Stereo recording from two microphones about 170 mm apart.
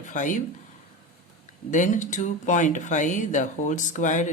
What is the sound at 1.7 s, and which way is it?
Speech, 45° left (ahead or behind).